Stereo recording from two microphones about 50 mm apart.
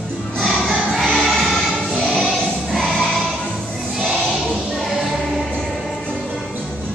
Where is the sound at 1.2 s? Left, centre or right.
Centre.